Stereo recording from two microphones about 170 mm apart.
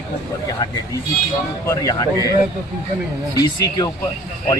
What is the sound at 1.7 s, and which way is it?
Speech, 20° left (ahead or behind).